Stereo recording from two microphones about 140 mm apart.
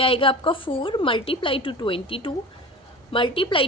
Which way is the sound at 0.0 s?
40° left (ahead or behind).